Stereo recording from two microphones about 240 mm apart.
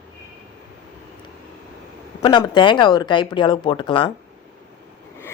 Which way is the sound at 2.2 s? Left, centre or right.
Centre.